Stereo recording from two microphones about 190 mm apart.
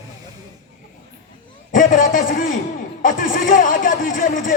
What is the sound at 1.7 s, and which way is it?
A man's voice, 45° left (ahead or behind).